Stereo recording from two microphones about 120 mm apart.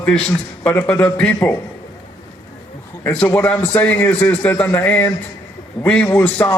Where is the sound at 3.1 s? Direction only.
15° left (ahead or behind).